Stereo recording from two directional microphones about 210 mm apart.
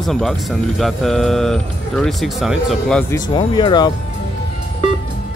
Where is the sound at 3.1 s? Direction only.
20° left (ahead or behind).